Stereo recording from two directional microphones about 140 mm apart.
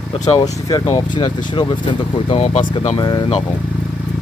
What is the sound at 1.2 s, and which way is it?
Speech, 35° left (ahead or behind).